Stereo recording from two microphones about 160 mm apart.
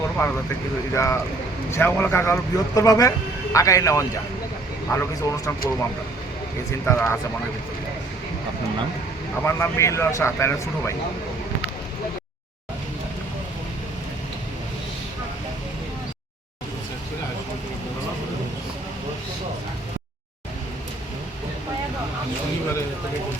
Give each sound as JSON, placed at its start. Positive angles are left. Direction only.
{"t": 0.9, "sound": "speech", "side_deg": 15}
{"t": 6.8, "sound": "speech", "side_deg": 15}
{"t": 9.4, "sound": "speech", "side_deg": 15}